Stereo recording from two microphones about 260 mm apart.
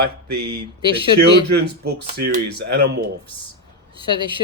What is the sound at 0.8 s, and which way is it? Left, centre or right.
Speech, centre.